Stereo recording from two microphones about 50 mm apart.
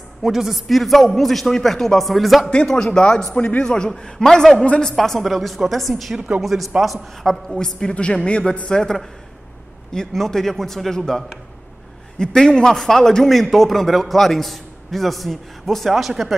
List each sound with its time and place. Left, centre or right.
0.2 s a man's voice: centre
2.5 s a man's voice: centre
3.6 s a man's voice: centre
4.9 s a man's voice: centre
7.5 s a man's voice: centre
12.2 s a man's voice: centre